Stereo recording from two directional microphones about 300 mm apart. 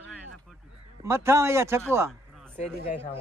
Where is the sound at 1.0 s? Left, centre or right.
Centre.